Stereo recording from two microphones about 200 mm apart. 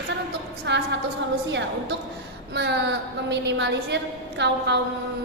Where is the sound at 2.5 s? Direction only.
60° right (ahead or behind).